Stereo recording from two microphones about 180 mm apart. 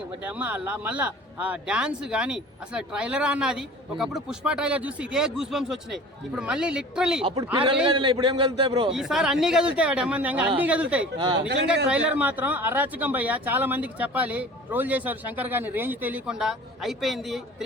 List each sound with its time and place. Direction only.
0.2 s speech: 10° right (ahead or behind)
7.5 s a man's voice: 30° right (ahead or behind)
8.9 s speech: centre (ahead or behind)